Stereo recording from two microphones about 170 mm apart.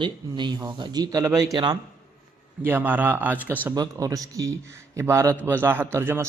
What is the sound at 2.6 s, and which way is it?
Speech, 10° right (ahead or behind).